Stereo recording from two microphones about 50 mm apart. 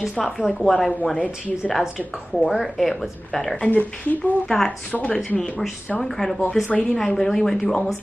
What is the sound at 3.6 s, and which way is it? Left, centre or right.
Speech, left.